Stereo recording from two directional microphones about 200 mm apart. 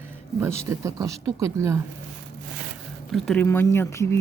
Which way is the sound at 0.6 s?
15° right (ahead or behind).